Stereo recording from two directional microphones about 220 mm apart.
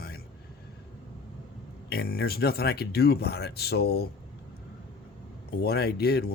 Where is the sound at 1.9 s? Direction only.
45° left (ahead or behind).